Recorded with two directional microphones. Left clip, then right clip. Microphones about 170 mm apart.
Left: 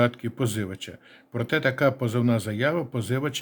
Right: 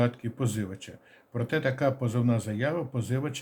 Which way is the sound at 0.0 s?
35° left (ahead or behind).